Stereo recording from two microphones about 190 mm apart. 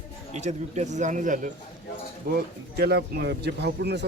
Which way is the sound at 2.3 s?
55° right (ahead or behind).